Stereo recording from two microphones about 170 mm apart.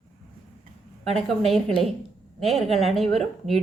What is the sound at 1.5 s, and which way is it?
Speech, centre (ahead or behind).